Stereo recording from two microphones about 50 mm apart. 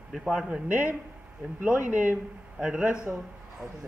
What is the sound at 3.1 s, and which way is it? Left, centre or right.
Speech, right.